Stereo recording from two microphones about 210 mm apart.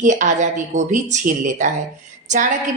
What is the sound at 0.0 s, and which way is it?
A woman's voice, 35° right (ahead or behind).